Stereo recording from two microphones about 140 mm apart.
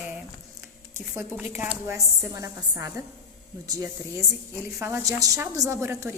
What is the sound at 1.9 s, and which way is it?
A woman's voice, 25° right (ahead or behind).